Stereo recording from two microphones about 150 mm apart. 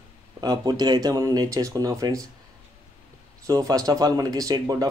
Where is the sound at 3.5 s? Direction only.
25° right (ahead or behind).